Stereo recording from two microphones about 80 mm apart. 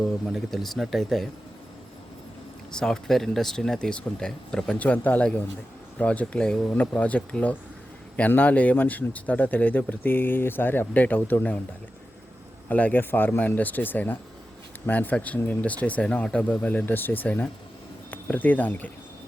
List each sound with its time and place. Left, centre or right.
0.3 s speech: centre
2.7 s speech: centre
4.8 s speech: centre
12.6 s speech: centre